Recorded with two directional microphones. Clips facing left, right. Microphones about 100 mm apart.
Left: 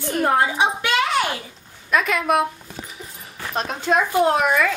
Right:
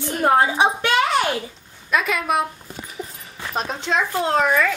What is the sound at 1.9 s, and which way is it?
Speech, centre (ahead or behind).